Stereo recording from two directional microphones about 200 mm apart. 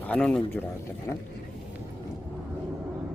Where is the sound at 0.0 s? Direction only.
5° left (ahead or behind).